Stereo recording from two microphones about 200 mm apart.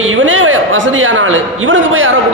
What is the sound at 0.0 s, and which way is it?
A man's voice, 70° right (ahead or behind).